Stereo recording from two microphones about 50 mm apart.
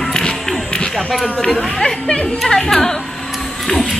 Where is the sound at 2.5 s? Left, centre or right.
Centre.